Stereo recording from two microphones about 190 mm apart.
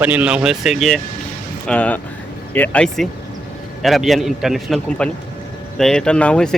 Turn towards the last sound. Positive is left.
turn(degrees=5)  # may be behind; listen again after turning